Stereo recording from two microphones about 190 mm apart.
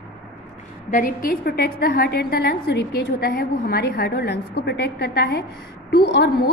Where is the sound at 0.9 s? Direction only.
45° left (ahead or behind).